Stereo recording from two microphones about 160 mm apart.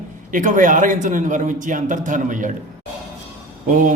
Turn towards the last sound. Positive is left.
turn(degrees=-55)  # may be behind; listen again after turning